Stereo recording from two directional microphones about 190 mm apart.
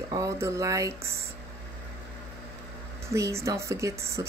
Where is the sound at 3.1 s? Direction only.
15° right (ahead or behind).